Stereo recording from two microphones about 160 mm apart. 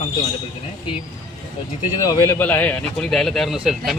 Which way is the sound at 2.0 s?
20° left (ahead or behind).